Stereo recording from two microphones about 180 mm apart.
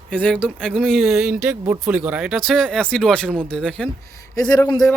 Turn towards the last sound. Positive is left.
turn(degrees=20)  # may be behind; listen again after turning